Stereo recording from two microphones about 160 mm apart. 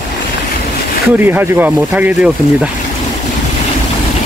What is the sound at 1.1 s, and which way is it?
Speech, 10° right (ahead or behind).